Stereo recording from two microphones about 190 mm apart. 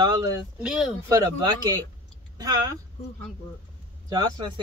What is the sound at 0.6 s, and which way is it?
Speech, 5° right (ahead or behind).